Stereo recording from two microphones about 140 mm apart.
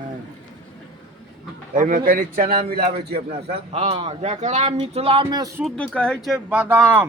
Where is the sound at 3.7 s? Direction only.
50° right (ahead or behind).